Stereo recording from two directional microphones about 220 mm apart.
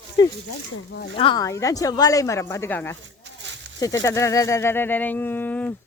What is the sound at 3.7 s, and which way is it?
Speech, 15° left (ahead or behind).